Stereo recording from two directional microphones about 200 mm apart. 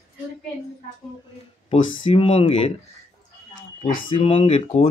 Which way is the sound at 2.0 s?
30° left (ahead or behind).